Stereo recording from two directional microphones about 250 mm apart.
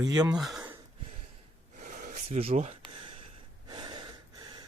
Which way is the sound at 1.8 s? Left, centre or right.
Right.